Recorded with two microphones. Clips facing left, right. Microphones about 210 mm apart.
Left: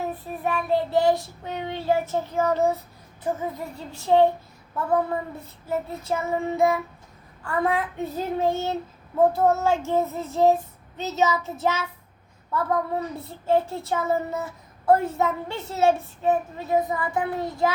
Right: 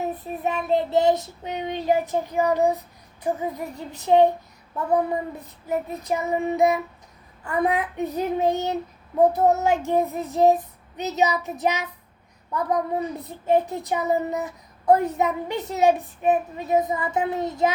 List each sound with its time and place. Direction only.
0.0 s child singing: 20° right (ahead or behind)